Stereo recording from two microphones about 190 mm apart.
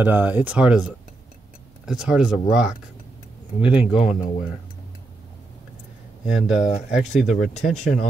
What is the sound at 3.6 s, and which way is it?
Speech, 10° right (ahead or behind).